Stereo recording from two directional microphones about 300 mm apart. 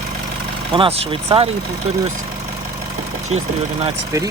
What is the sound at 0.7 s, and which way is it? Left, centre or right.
Speech, centre.